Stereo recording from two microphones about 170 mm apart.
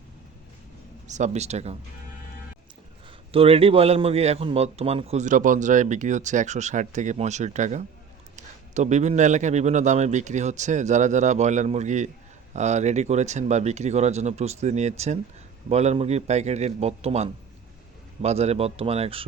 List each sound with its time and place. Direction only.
1.0 s speech: 45° right (ahead or behind)
3.3 s a man's voice: 35° right (ahead or behind)